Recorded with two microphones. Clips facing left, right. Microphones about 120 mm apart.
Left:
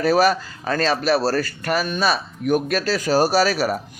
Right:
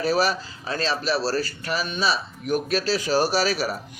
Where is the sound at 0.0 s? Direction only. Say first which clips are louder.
Left 5 dB; 50° left (ahead or behind).